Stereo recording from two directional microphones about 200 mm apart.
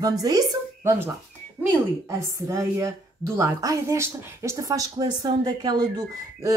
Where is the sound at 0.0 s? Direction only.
20° right (ahead or behind).